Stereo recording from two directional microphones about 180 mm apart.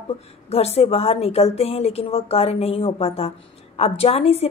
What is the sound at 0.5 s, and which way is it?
A woman's voice, 35° left (ahead or behind).